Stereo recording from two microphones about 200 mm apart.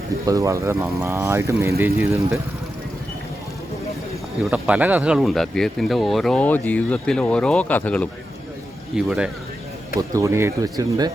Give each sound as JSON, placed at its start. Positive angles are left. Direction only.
{"t": 0.3, "sound": "speech", "side_deg": -15}
{"t": 4.4, "sound": "speech", "side_deg": -5}
{"t": 9.0, "sound": "speech", "side_deg": -5}